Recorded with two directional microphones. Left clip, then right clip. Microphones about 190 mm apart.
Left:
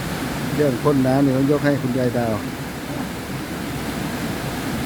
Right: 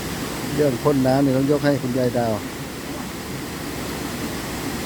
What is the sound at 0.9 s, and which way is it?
Speech, 10° right (ahead or behind).